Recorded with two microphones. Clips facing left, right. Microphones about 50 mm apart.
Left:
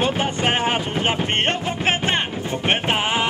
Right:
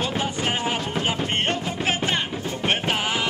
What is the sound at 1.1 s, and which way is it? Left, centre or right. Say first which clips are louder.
Music: left 3 dB; left.